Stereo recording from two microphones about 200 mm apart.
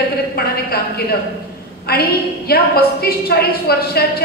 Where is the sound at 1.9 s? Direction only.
50° left (ahead or behind).